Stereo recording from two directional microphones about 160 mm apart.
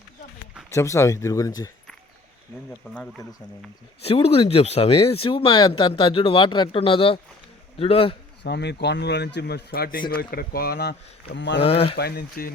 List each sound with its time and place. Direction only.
0.7 s speech: 15° left (ahead or behind)
4.0 s speech: 40° left (ahead or behind)
8.4 s speech: 90° left
11.6 s speech: 35° left (ahead or behind)
11.9 s speech: 85° left